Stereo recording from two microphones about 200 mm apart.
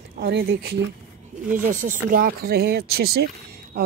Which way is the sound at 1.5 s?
40° right (ahead or behind).